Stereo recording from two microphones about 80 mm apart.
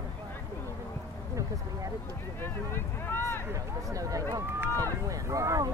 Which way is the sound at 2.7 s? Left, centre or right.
Left.